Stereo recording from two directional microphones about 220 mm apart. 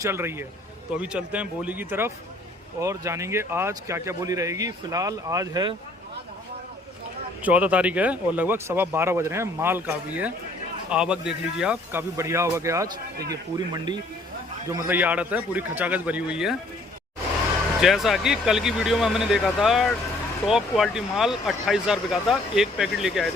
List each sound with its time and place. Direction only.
0.0 s speech: 10° right (ahead or behind)
7.4 s speech: 5° right (ahead or behind)
14.8 s speech: 10° right (ahead or behind)
17.7 s speech: centre (ahead or behind)